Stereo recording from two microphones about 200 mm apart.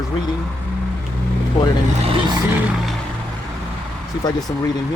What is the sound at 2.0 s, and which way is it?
Vehicle, 25° right (ahead or behind).